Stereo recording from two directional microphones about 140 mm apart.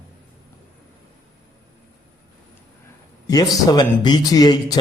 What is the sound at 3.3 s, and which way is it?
Speech, 25° left (ahead or behind).